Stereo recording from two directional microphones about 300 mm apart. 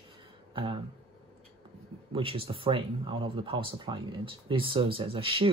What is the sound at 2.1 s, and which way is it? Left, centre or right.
Speech, centre.